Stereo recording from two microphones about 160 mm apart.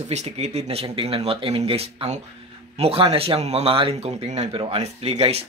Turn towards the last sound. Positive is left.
turn(degrees=-40)  # may be behind; listen again after turning